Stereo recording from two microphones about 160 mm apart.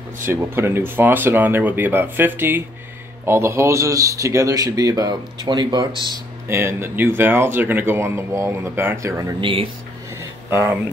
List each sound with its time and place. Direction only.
0.3 s a man's voice: 15° right (ahead or behind)
6.5 s speech: 15° right (ahead or behind)
9.4 s speech: 35° right (ahead or behind)
10.5 s speech: 15° right (ahead or behind)